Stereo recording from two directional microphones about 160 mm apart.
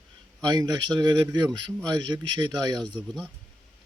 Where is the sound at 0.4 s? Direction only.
25° right (ahead or behind).